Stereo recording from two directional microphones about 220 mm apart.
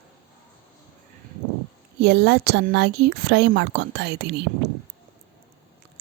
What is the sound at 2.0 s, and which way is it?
Speech, 50° right (ahead or behind).